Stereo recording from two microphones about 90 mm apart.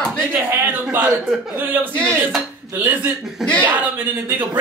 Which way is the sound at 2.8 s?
20° right (ahead or behind).